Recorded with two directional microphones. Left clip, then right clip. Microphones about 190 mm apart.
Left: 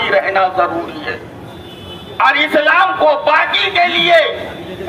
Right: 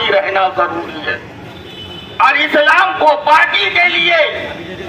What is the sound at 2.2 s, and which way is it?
Speech, 10° left (ahead or behind).